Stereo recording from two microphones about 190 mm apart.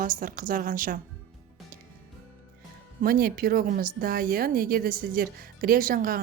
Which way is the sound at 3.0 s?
50° right (ahead or behind).